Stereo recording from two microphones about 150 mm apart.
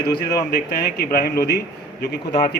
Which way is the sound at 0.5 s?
90° left.